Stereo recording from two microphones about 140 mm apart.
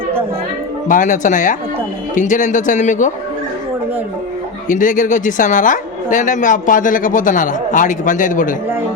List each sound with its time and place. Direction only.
0.9 s a woman's voice: 70° left (ahead or behind)
4.7 s a woman's voice: 70° left (ahead or behind)